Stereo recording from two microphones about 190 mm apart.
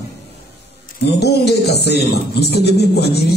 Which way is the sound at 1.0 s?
60° left (ahead or behind).